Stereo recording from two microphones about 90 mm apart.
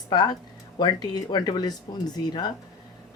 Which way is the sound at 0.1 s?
50° left (ahead or behind).